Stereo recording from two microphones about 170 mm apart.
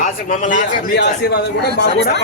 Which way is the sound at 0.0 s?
50° left (ahead or behind).